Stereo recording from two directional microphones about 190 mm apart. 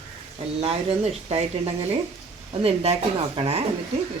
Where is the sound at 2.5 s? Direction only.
30° right (ahead or behind).